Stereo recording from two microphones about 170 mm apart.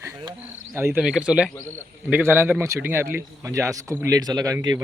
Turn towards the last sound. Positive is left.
turn(degrees=-20)  # may be behind; listen again after turning